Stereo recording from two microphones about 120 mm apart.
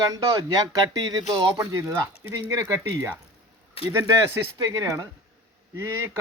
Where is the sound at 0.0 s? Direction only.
30° right (ahead or behind).